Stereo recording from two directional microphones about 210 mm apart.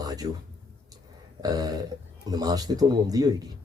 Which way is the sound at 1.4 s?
20° right (ahead or behind).